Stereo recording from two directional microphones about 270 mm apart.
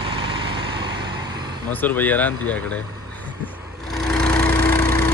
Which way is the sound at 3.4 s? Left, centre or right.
Centre.